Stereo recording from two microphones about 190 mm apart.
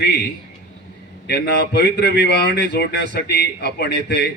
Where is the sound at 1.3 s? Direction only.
60° left (ahead or behind).